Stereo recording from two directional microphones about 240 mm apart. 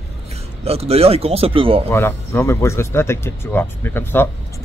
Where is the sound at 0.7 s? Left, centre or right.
Right.